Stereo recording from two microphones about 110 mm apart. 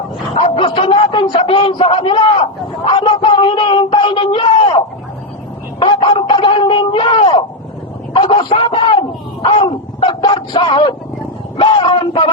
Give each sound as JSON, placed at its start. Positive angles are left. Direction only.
{"t": 0.3, "sound": "a man's voice", "side_deg": 55}
{"t": 5.8, "sound": "a man's voice", "side_deg": 50}